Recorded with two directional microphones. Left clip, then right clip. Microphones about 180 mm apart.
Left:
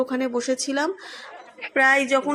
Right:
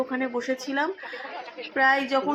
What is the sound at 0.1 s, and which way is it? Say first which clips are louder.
Speech: left 3 dB; 25° left (ahead or behind).